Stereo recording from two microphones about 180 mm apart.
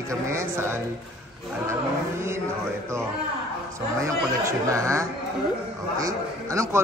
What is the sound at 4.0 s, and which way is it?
A man's voice, 15° right (ahead or behind).